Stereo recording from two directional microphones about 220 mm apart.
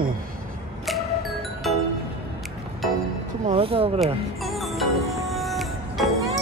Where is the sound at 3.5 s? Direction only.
25° right (ahead or behind).